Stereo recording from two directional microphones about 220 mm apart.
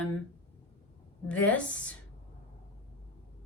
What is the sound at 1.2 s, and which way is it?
Speech, 5° left (ahead or behind).